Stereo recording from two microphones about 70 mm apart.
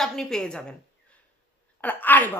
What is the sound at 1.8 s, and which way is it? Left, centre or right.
Speech, left.